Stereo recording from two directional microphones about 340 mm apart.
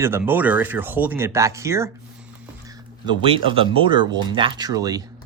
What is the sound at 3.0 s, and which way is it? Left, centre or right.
Speech, centre.